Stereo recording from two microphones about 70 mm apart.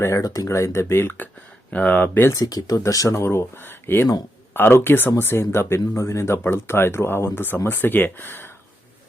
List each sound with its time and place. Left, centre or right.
0.0 s speech: left
1.7 s speech: left
2.3 s speech: left
3.2 s speech: left